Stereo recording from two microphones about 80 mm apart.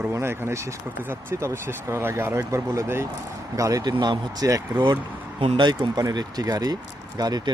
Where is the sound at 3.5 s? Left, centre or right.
Right.